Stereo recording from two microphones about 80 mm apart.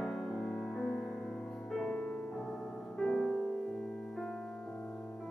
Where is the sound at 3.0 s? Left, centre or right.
Centre.